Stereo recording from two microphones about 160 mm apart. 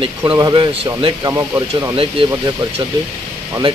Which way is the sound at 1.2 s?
20° right (ahead or behind).